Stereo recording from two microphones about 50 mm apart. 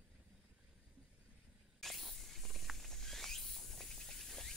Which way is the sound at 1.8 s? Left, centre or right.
Centre.